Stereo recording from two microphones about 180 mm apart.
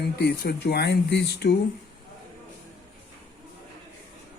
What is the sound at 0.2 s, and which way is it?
Speech, 65° left (ahead or behind).